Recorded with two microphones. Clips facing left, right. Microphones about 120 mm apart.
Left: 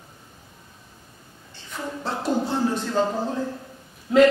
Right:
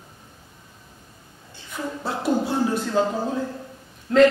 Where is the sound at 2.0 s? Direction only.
10° right (ahead or behind).